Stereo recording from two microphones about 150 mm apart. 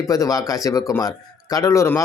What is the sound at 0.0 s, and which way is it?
Speech, 25° left (ahead or behind).